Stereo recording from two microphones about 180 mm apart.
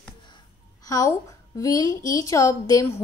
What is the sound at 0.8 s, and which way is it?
A woman's voice, 20° left (ahead or behind).